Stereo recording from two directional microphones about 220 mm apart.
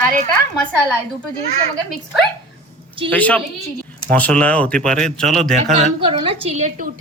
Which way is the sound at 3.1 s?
5° left (ahead or behind).